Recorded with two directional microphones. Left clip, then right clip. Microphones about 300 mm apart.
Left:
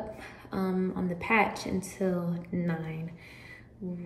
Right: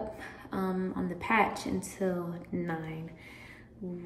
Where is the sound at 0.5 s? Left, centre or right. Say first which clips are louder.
Left 1 dB; centre.